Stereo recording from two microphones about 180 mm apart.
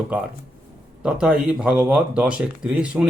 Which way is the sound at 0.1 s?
10° right (ahead or behind).